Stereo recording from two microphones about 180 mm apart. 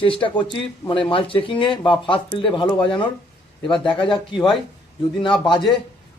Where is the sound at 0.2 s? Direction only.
25° left (ahead or behind).